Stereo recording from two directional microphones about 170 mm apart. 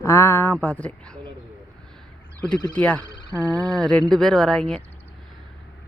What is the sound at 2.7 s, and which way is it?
Speech, 10° left (ahead or behind).